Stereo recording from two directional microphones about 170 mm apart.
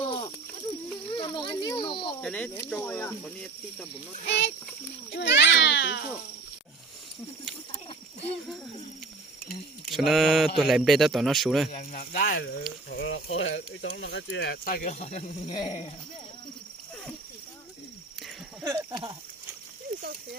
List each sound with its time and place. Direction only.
1.1 s a sound: 30° left (ahead or behind)
2.2 s speech: 5° left (ahead or behind)
4.3 s a child's voice: 90° left
7.7 s a sound: 35° left (ahead or behind)
9.9 s speech: centre (ahead or behind)
11.8 s speech: 55° left (ahead or behind)
12.9 s speech: 90° left; by 15.4 s 40° left (ahead or behind)
15.4 s speech: 25° left (ahead or behind)
18.6 s speech: 20° right (ahead or behind)